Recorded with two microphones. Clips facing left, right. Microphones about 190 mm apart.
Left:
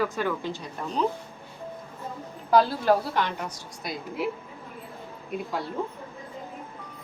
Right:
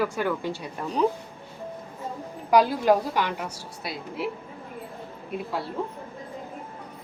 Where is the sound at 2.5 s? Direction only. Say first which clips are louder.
Right 1 dB; 15° right (ahead or behind).